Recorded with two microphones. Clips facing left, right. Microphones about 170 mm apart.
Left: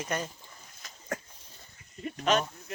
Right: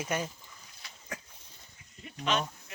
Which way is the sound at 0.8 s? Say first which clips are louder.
Left 7 dB; 45° left (ahead or behind).